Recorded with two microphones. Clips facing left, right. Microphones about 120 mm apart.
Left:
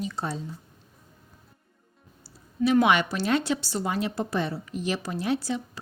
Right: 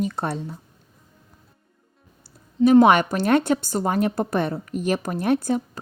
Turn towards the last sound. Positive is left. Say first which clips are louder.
# right 6 dB
turn(degrees=-50)  # may be behind; listen again after turning